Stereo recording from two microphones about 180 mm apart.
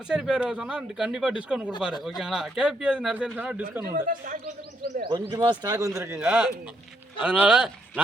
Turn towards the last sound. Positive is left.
turn(degrees=-5)  # may be behind; listen again after turning